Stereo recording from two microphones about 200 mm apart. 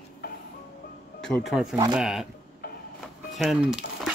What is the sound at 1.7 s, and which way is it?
Speech, 20° right (ahead or behind).